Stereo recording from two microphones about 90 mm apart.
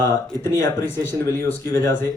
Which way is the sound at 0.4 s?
30° left (ahead or behind).